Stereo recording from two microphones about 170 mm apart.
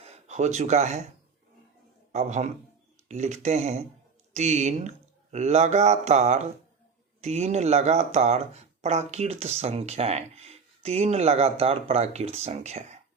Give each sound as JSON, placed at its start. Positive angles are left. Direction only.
{"t": 0.0, "sound": "speech", "side_deg": -40}
{"t": 2.1, "sound": "speech", "side_deg": -40}